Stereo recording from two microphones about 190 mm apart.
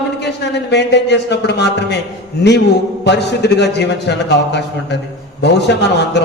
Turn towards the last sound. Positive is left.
turn(degrees=65)  # may be behind; listen again after turning